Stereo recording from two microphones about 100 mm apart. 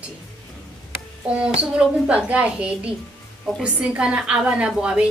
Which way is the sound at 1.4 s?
10° right (ahead or behind).